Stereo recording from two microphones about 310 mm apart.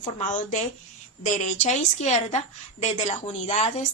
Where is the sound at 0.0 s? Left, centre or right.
Left.